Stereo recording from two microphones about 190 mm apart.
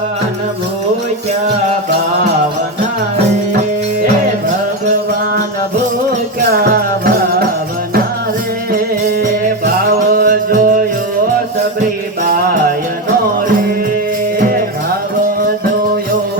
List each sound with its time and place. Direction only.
6.6 s music: 55° right (ahead or behind)
10.2 s music: 50° right (ahead or behind)